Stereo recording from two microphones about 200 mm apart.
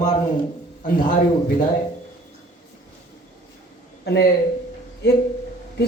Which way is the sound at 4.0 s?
55° left (ahead or behind).